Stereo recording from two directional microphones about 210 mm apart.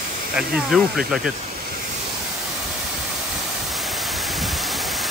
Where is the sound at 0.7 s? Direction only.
Centre (ahead or behind).